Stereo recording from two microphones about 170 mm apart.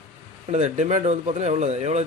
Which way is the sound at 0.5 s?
40° right (ahead or behind).